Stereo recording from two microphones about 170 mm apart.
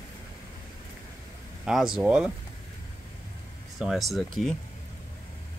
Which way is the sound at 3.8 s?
Centre (ahead or behind).